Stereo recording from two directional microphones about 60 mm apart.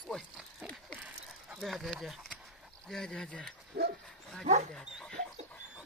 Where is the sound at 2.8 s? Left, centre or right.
Centre.